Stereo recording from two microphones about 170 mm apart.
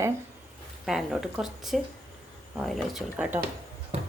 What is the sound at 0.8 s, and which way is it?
A woman's voice, centre (ahead or behind).